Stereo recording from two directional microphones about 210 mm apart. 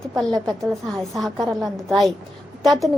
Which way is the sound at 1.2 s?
Centre (ahead or behind).